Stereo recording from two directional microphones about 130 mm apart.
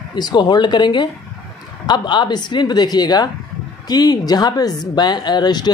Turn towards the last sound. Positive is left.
turn(degrees=35)  # may be behind; listen again after turning